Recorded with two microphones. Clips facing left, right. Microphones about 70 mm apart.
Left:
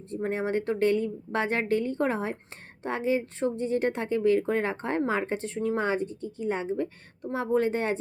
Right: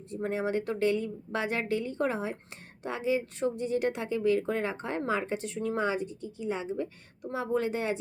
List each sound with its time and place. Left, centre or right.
0.1 s a woman's voice: left